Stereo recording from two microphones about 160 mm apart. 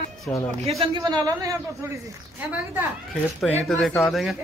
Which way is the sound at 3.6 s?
Centre (ahead or behind).